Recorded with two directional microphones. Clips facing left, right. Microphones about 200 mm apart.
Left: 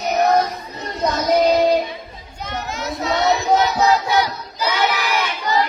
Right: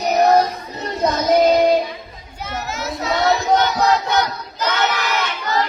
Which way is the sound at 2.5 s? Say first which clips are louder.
Even; 5° right (ahead or behind).